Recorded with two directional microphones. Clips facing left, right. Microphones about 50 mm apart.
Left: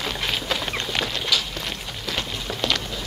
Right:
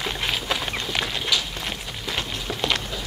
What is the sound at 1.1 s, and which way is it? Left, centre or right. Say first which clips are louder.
Walk: even; centre.